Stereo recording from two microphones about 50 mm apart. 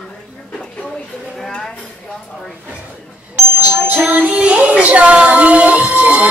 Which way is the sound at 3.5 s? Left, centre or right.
Right.